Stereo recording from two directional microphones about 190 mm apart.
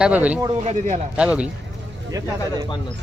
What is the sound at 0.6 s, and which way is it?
Speech, 40° right (ahead or behind).